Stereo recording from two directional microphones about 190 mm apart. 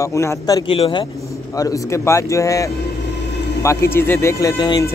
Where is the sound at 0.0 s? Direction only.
15° left (ahead or behind).